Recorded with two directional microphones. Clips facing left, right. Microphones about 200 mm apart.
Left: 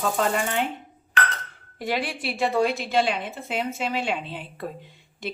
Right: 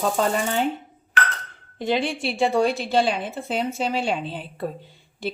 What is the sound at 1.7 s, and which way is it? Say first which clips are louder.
A woman's voice: right 4 dB; 25° right (ahead or behind).